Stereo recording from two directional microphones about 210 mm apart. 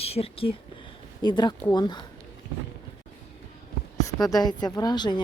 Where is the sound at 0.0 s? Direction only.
30° left (ahead or behind).